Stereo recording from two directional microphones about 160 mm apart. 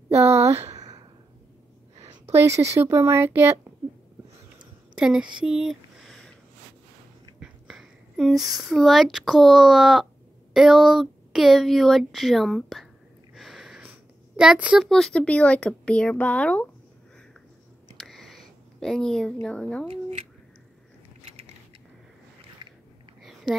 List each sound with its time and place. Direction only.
0.1 s a sound: 15° right (ahead or behind)
2.3 s speech: 15° right (ahead or behind)
4.9 s a sound: 5° right (ahead or behind)
7.3 s a child's voice: centre (ahead or behind)
17.9 s a sound: centre (ahead or behind)
19.4 s speech: 5° left (ahead or behind)
19.9 s speech: 40° right (ahead or behind)
21.2 s mechanisms: 40° right (ahead or behind)
22.6 s biting: 30° right (ahead or behind)